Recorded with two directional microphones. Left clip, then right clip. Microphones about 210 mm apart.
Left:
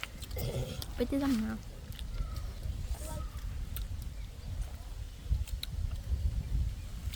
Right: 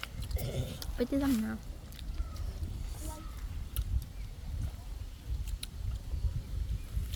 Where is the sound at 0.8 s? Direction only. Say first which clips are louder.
Right 1 dB; 10° right (ahead or behind).